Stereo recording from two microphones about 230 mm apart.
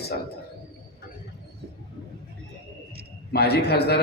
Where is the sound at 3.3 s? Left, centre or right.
Left.